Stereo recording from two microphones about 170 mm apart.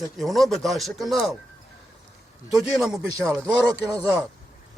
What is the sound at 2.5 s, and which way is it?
Speech, 5° right (ahead or behind).